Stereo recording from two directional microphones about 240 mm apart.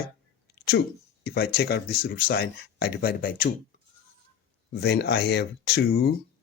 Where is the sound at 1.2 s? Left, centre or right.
Left.